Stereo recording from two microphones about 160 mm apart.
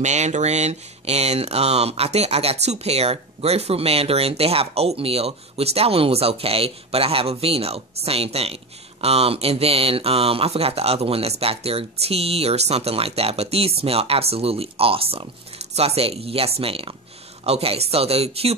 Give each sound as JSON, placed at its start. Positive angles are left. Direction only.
{"t": 0.0, "sound": "speech", "side_deg": -45}